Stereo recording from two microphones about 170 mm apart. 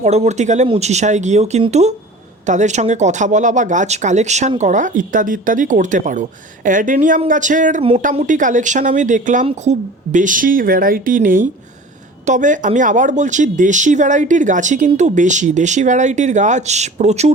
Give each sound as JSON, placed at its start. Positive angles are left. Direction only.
{"t": 0.0, "sound": "speech", "side_deg": -40}
{"t": 7.8, "sound": "speech", "side_deg": -35}